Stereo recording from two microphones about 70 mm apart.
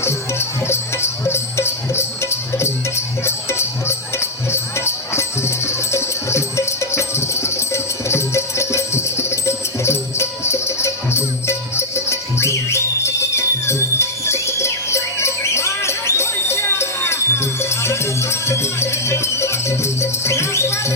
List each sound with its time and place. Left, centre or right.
0.0 s music: left